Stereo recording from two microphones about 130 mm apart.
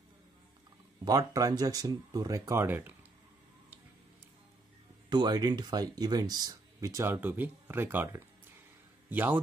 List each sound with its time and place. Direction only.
1.0 s speech: 25° right (ahead or behind)
5.1 s a man's voice: 30° right (ahead or behind); by 9.4 s 15° right (ahead or behind)